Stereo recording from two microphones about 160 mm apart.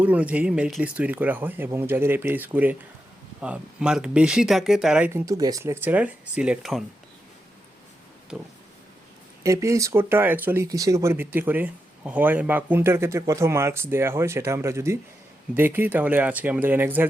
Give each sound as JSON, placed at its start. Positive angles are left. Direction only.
{"t": 0.0, "sound": "speech", "side_deg": -10}
{"t": 5.1, "sound": "speech", "side_deg": -20}
{"t": 8.3, "sound": "speech", "side_deg": 0}
{"t": 9.4, "sound": "speech", "side_deg": -20}